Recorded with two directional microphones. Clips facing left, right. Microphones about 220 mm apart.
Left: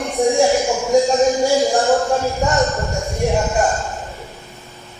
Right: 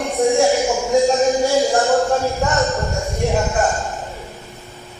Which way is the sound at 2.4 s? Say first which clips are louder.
Left 1 dB; centre (ahead or behind).